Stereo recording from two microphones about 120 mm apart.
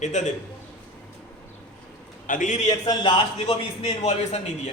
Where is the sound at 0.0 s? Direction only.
80° left.